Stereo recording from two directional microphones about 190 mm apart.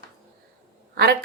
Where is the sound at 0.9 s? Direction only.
55° right (ahead or behind).